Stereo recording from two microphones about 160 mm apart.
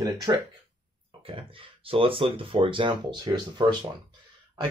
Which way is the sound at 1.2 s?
35° right (ahead or behind).